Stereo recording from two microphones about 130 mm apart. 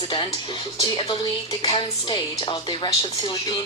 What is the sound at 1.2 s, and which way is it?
Dishes, 30° left (ahead or behind).